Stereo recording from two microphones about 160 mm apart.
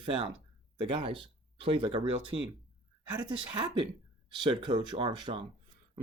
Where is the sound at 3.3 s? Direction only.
30° right (ahead or behind).